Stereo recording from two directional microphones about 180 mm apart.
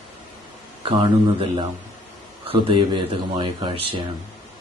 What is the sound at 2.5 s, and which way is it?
Speech, 30° right (ahead or behind).